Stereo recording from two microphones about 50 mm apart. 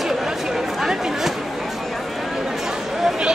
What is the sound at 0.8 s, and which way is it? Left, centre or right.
Chatter, centre.